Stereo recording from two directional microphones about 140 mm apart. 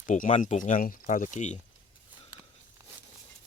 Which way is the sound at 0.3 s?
60° left (ahead or behind).